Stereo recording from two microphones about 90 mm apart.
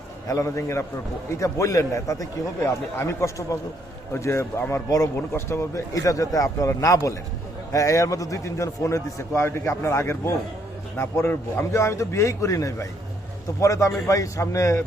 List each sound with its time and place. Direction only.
0.3 s a man's voice: 35° left (ahead or behind)